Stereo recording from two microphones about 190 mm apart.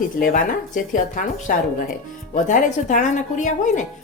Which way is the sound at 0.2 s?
45° left (ahead or behind).